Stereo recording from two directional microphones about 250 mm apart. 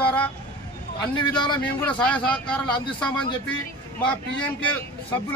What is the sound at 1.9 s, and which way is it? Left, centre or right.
A man's voice, centre.